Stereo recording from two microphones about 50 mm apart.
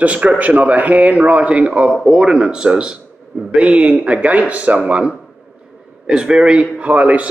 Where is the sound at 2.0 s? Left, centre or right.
Centre.